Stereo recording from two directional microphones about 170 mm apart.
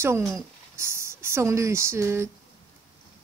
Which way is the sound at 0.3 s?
15° right (ahead or behind).